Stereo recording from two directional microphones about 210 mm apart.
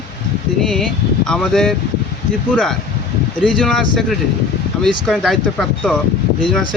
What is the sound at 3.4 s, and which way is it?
Speech, centre (ahead or behind).